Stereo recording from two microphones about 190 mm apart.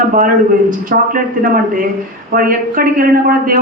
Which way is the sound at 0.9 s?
50° right (ahead or behind).